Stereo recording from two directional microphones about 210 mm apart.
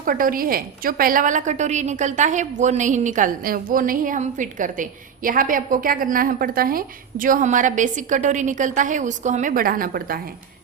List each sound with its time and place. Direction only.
0.0 s a woman's voice: 40° right (ahead or behind)